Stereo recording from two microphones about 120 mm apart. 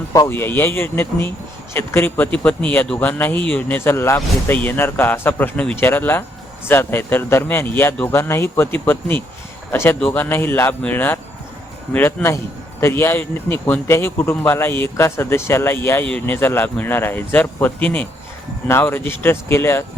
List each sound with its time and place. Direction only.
0.3 s a man's voice: 15° left (ahead or behind)